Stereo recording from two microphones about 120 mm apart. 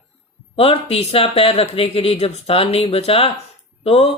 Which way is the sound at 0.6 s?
55° left (ahead or behind).